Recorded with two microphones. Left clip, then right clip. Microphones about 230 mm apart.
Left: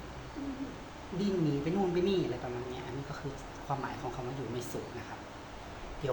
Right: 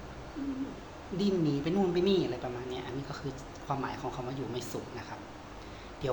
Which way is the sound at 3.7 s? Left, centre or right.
Centre.